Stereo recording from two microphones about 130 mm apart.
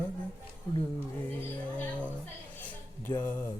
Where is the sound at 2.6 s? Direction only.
15° left (ahead or behind).